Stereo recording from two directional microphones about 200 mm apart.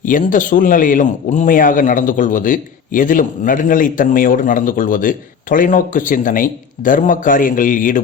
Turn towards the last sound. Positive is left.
turn(degrees=45)  # may be behind; listen again after turning